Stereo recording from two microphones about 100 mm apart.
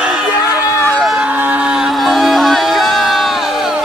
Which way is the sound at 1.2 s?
15° right (ahead or behind).